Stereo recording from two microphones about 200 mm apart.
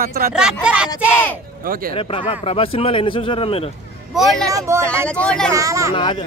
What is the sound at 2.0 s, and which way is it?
Speech, 25° left (ahead or behind).